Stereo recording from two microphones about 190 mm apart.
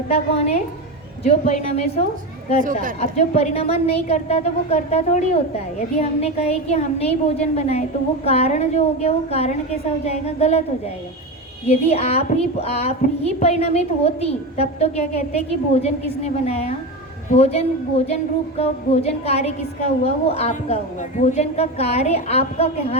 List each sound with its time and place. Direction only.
0.1 s a woman's voice: 35° left (ahead or behind)
3.0 s a woman's voice: 35° left (ahead or behind)
11.6 s a woman's voice: 35° left (ahead or behind)